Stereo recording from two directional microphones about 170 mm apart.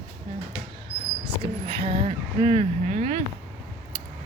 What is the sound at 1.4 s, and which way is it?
Speech, 35° right (ahead or behind).